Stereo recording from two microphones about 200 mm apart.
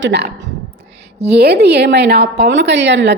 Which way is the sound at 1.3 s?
55° right (ahead or behind).